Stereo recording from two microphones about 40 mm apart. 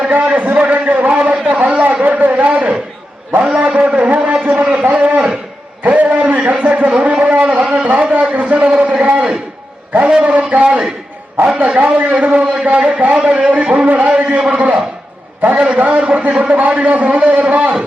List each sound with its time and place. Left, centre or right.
0.1 s a sound: right
6.9 s a man's voice: right
10.2 s a man's voice: right
13.8 s a man's voice: right
14.1 s a man's voice: right